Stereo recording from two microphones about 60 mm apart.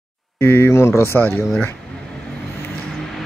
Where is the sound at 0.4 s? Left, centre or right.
Left.